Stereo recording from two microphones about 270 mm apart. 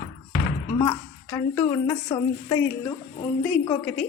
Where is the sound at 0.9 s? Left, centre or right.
Centre.